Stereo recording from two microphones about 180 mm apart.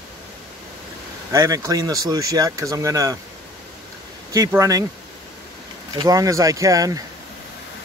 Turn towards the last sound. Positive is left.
turn(degrees=-20)  # may be behind; listen again after turning